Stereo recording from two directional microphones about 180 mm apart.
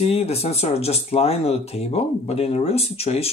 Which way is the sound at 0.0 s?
35° left (ahead or behind).